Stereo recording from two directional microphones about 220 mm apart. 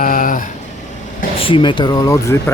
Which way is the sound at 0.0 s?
40° left (ahead or behind).